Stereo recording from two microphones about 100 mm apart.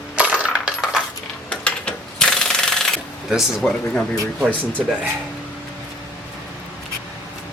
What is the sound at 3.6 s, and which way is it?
Speech, 10° left (ahead or behind).